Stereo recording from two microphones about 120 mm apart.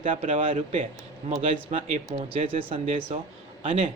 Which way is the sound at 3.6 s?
80° right.